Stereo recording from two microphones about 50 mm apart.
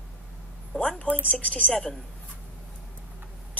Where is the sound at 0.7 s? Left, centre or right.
Left.